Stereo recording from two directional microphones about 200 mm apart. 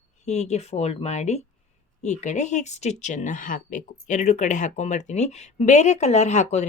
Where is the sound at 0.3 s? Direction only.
35° left (ahead or behind).